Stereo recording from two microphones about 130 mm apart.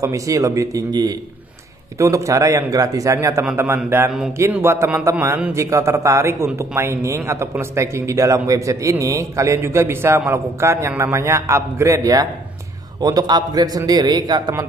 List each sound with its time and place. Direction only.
0.0 s a man's voice: 25° right (ahead or behind)